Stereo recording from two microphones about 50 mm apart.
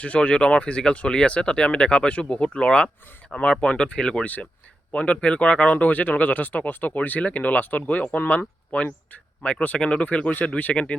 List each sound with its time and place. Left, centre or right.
0.0 s speech: left
9.4 s speech: left